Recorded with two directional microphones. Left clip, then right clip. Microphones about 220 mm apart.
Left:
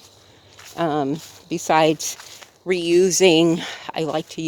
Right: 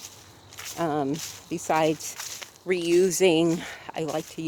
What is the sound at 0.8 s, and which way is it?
Speech, 45° left (ahead or behind).